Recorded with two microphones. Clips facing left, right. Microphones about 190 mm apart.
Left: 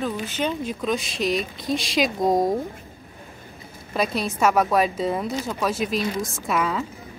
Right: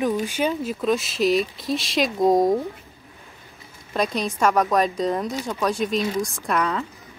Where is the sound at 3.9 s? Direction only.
5° left (ahead or behind).